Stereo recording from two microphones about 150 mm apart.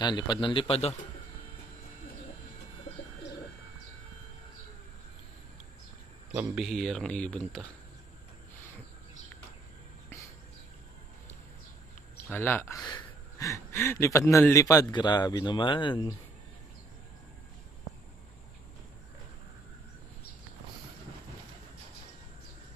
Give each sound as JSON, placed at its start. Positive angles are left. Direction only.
{"t": 0.0, "sound": "speech", "side_deg": 30}
{"t": 6.3, "sound": "speech", "side_deg": -5}
{"t": 12.3, "sound": "speech", "side_deg": 15}